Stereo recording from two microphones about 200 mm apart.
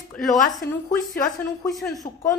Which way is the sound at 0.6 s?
50° left (ahead or behind).